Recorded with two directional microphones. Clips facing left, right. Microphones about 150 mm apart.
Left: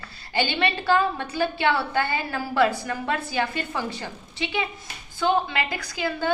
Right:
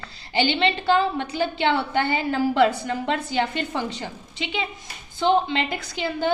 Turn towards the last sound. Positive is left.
turn(degrees=-25)  # may be behind; listen again after turning